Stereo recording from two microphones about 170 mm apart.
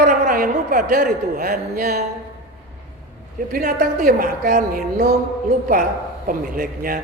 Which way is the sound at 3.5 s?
60° right (ahead or behind).